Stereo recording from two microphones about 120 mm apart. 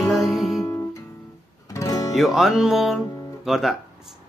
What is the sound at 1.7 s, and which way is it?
Music, 30° left (ahead or behind).